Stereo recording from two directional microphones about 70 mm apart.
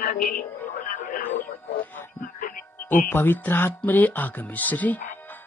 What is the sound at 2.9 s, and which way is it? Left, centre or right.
Speech, left.